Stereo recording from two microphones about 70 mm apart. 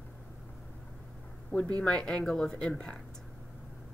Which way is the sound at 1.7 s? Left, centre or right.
Centre.